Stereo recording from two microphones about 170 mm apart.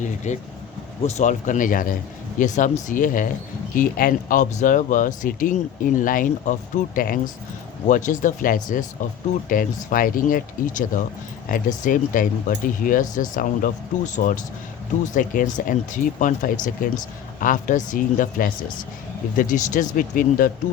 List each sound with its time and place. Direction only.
0.0 s speech: 45° left (ahead or behind)